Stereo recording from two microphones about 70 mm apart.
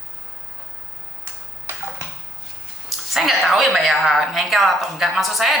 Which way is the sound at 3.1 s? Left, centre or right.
Centre.